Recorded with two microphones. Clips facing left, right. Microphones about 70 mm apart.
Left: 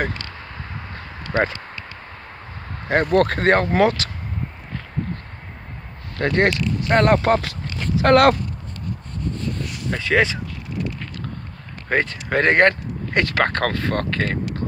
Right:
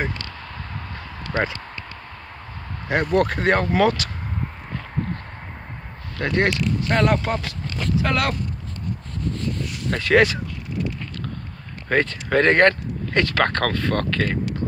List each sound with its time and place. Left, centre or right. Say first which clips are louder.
0.9 s a sound: left 3 dB; left
2.9 s speech: left 3 dB; left
6.1 s speech: left 3 dB; left
7.1 s speech: left 5 dB; left
8.0 s speech: left 12 dB; left
9.8 s speech: right 2 dB; centre
11.9 s speech: right 1 dB; left